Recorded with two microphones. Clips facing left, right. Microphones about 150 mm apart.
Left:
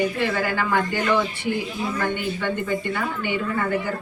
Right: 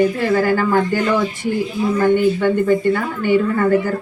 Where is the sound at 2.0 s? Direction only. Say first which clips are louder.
Right 13 dB; 45° right (ahead or behind).